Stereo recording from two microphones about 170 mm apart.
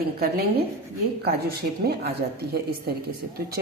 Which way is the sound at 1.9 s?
70° right (ahead or behind).